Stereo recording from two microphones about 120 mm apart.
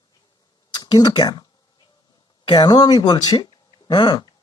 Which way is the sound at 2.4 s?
40° left (ahead or behind).